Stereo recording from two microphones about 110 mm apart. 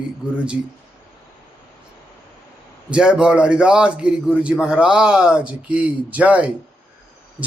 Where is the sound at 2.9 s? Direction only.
10° right (ahead or behind).